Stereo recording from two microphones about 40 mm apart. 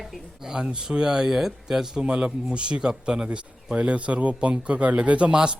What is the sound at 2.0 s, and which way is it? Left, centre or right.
A man's voice, right.